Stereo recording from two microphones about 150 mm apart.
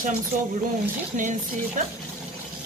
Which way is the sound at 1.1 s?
55° right (ahead or behind).